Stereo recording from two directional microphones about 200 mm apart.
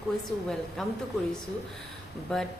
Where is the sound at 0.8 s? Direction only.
Centre (ahead or behind).